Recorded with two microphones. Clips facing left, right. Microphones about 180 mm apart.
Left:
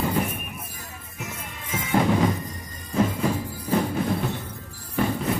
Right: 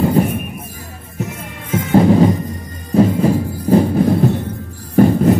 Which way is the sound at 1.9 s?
35° right (ahead or behind).